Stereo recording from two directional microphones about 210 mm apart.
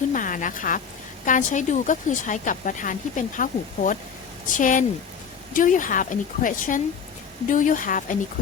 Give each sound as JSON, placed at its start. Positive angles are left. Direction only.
{"t": 0.1, "sound": "a woman's voice", "side_deg": 40}